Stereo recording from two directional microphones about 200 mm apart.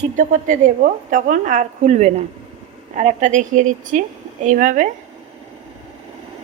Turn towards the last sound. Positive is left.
turn(degrees=-40)  # may be behind; listen again after turning